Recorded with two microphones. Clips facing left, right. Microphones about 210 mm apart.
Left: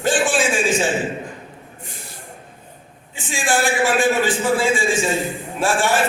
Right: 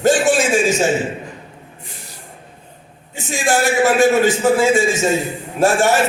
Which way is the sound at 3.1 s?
40° right (ahead or behind).